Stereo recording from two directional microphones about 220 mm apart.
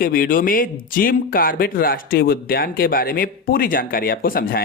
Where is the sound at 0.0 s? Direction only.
40° left (ahead or behind).